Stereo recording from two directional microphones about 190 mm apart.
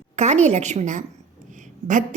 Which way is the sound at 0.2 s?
35° right (ahead or behind).